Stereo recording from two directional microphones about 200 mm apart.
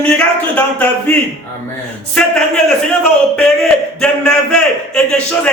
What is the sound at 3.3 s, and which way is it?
A man's voice, 5° left (ahead or behind).